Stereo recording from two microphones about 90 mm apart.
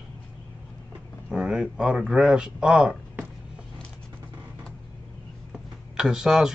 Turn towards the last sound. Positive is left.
turn(degrees=-5)  # may be behind; listen again after turning